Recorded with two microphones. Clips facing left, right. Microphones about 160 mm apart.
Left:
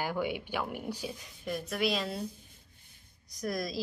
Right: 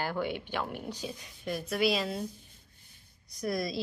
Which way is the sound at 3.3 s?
Centre (ahead or behind).